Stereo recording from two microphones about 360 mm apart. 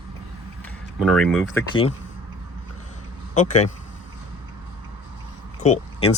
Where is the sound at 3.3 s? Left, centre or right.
Centre.